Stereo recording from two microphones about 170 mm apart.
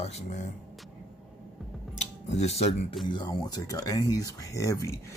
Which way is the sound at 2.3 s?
40° left (ahead or behind).